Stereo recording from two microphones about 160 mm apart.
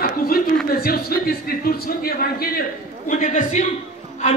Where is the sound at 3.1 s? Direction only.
55° left (ahead or behind).